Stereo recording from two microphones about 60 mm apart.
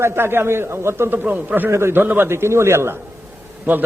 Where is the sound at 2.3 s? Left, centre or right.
Right.